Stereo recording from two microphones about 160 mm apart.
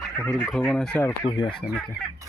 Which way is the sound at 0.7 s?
5° left (ahead or behind).